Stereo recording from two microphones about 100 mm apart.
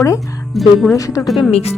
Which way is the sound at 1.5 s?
90° left.